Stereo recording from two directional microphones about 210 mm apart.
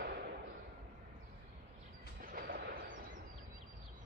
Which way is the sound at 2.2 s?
45° right (ahead or behind).